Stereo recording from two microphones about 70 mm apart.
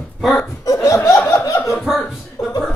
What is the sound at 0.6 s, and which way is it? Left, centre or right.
Speech, left.